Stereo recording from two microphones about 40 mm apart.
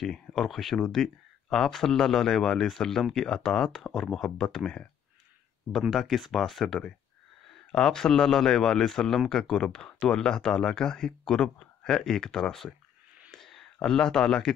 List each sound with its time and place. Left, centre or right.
0.0 s speech: centre
3.9 s speech: centre
5.7 s speech: centre
6.4 s speech: centre
13.3 s whispering: centre
13.7 s speech: centre